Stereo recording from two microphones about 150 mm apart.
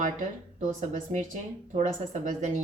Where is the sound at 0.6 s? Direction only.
55° right (ahead or behind).